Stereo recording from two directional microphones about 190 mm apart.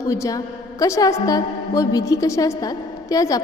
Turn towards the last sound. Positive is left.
turn(degrees=20)  # may be behind; listen again after turning